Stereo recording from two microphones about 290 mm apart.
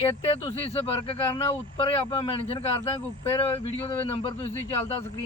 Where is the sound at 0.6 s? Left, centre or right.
Centre.